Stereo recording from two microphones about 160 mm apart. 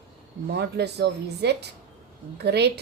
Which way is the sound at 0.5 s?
90° right.